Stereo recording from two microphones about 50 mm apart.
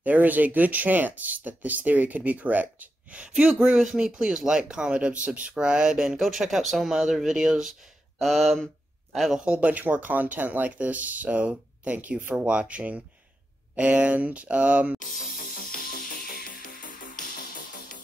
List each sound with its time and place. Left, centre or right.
0.0 s speech: right
3.7 s speech: centre
8.2 s a sound: centre
9.4 s speech: right
12.4 s speech: right